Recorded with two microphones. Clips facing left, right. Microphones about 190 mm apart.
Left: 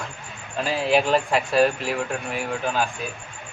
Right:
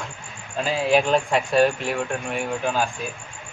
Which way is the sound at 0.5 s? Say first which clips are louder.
Right 1 dB; centre (ahead or behind).